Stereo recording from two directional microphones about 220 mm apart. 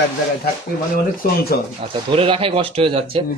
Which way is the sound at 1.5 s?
45° left (ahead or behind).